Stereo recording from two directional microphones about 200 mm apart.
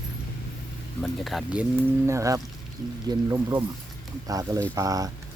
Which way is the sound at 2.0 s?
15° right (ahead or behind).